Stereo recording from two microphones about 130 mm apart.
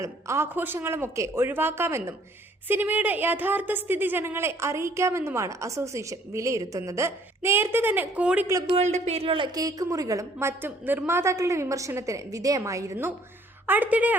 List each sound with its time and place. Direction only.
0.0 s a woman's voice: 20° right (ahead or behind)
8.6 s speech: 55° right (ahead or behind)
9.6 s a woman's voice: 30° right (ahead or behind)
10.3 s a woman's voice: 15° right (ahead or behind)